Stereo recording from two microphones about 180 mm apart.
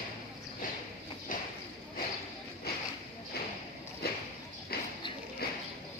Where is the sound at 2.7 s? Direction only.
60° left (ahead or behind).